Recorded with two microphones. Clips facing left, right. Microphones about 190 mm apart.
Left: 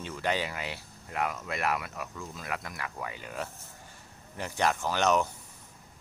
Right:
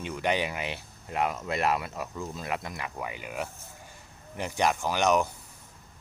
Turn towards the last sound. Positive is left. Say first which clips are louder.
# right 2 dB
turn(degrees=-10)  # may be behind; listen again after turning